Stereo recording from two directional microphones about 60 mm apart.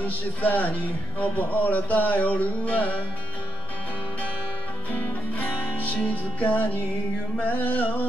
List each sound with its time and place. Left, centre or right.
0.0 s music: left
5.0 s music: left